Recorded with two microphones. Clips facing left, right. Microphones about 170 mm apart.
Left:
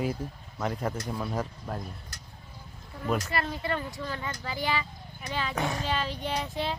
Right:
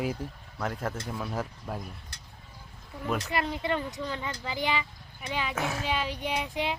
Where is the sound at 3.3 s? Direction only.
15° right (ahead or behind).